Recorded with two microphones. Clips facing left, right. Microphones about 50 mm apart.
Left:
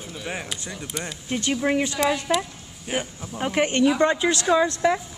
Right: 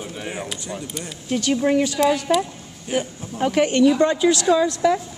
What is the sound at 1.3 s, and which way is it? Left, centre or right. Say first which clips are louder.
Speech: right 4 dB; left.